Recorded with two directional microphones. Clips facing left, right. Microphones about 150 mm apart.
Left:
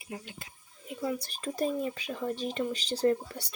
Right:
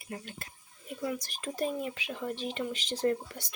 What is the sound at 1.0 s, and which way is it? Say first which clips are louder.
Speech: left 2 dB; 30° left (ahead or behind).